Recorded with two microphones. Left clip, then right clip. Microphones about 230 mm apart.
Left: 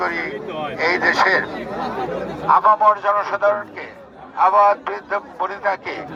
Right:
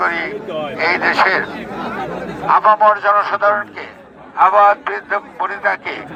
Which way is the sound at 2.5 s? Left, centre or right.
Right.